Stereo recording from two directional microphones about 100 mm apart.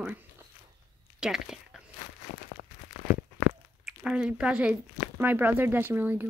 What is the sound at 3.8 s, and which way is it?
Speech, 5° right (ahead or behind).